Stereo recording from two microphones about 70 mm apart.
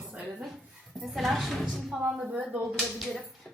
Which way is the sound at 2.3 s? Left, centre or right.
Right.